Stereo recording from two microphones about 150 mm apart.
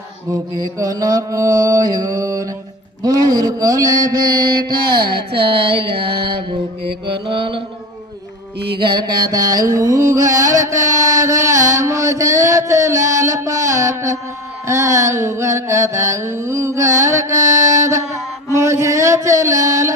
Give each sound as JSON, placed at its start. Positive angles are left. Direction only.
{"t": 0.3, "sound": "music", "side_deg": -25}
{"t": 4.8, "sound": "speech", "side_deg": -30}
{"t": 5.9, "sound": "mantra", "side_deg": -90}
{"t": 7.2, "sound": "speech", "side_deg": -35}
{"t": 8.5, "sound": "mantra", "side_deg": -90}
{"t": 8.8, "sound": "mantra", "side_deg": -30}
{"t": 13.2, "sound": "a sound", "side_deg": -20}
{"t": 14.7, "sound": "music", "side_deg": -20}